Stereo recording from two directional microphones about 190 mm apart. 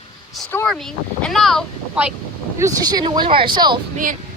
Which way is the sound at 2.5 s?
15° right (ahead or behind).